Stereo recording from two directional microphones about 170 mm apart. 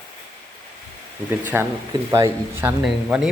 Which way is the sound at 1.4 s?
15° right (ahead or behind).